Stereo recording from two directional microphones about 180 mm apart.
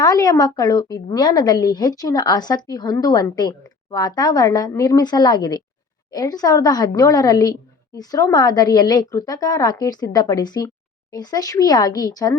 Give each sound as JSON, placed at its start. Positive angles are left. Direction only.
{"t": 0.0, "sound": "a woman's voice", "side_deg": 20}